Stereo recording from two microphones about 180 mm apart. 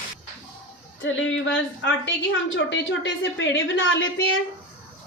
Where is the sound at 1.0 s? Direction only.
90° left.